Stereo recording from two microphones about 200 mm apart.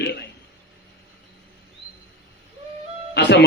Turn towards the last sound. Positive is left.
turn(degrees=60)  # may be behind; listen again after turning